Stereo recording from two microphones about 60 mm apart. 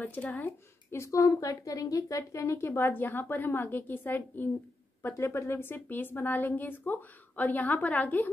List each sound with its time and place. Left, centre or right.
0.0 s speech: left
0.9 s a woman's voice: left